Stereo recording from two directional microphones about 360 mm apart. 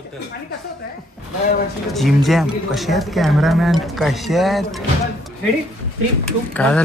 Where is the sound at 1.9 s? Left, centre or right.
Centre.